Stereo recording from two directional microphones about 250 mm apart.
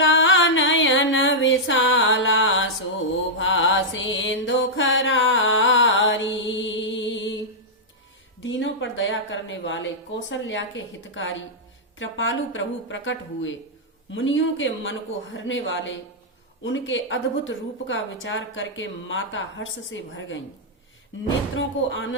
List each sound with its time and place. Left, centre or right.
0.0 s music: left
3.3 s mantra: left
8.4 s a woman's voice: left
21.5 s a woman's voice: left